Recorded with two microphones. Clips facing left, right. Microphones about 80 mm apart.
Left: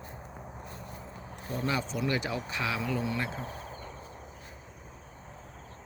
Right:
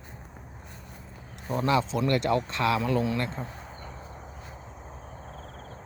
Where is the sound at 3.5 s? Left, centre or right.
Centre.